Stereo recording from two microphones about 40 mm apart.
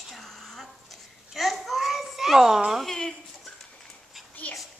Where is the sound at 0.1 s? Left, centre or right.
Centre.